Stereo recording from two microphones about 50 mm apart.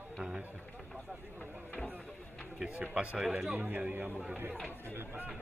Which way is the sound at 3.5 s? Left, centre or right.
Right.